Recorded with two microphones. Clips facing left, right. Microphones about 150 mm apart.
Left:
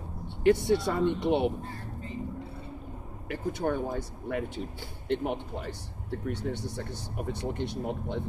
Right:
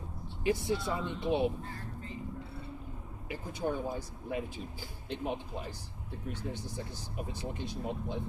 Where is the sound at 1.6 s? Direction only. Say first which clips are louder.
Left 3 dB; 30° left (ahead or behind).